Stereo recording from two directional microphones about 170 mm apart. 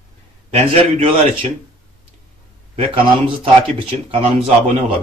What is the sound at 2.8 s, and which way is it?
A man's voice, 30° right (ahead or behind).